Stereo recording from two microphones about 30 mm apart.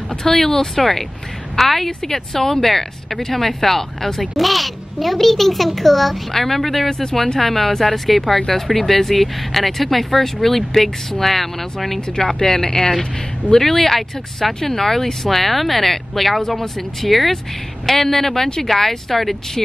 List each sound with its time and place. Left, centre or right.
0.2 s speech: centre
1.9 s speech: centre
6.9 s speech: centre
12.2 s speech: centre